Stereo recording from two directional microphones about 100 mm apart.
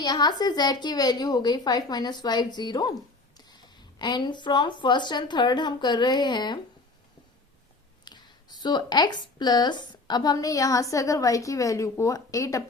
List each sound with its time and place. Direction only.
0.0 s a woman's voice: 45° left (ahead or behind)
8.0 s speech: 45° left (ahead or behind)